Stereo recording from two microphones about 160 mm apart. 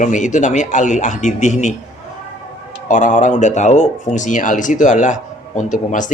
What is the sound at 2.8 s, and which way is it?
Speech, 50° left (ahead or behind).